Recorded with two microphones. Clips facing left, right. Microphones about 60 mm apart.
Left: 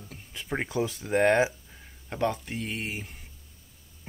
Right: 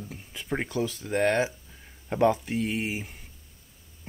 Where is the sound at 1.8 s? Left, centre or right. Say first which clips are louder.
Right 6 dB; centre.